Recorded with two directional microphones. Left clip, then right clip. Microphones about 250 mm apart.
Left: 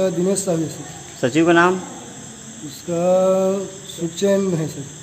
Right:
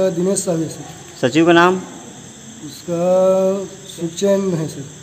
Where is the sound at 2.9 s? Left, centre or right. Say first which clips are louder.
Right 2 dB; centre.